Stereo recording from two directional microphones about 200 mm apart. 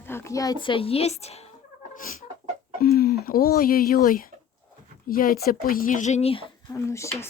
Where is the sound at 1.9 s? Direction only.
40° left (ahead or behind).